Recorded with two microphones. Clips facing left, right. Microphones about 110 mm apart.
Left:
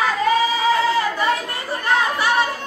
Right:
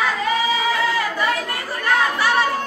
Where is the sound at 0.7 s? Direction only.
30° left (ahead or behind).